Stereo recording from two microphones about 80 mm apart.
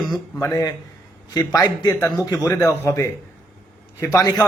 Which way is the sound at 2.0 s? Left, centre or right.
Left.